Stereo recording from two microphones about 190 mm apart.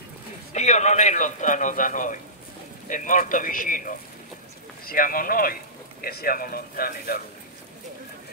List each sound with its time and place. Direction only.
0.5 s a man's voice: 35° left (ahead or behind)